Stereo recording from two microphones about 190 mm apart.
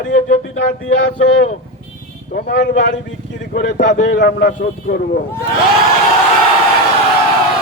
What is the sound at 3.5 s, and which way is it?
A man's voice, 45° left (ahead or behind).